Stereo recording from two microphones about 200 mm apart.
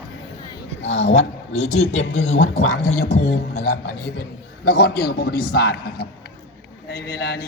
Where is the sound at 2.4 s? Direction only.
90° left.